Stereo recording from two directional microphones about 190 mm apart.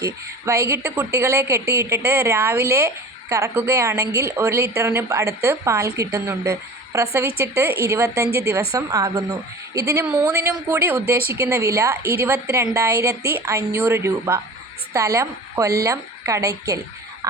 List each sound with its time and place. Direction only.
0.0 s a woman's voice: 15° right (ahead or behind)